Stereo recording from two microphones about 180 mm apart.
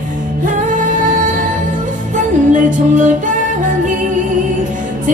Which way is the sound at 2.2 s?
45° right (ahead or behind).